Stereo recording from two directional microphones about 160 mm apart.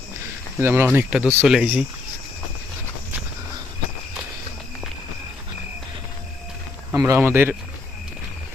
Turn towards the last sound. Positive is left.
turn(degrees=-15)  # may be behind; listen again after turning